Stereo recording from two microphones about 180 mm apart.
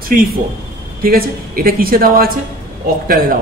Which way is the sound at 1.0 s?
55° right (ahead or behind).